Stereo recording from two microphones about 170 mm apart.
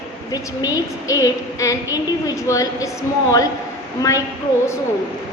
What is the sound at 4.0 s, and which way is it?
Speech, 20° left (ahead or behind).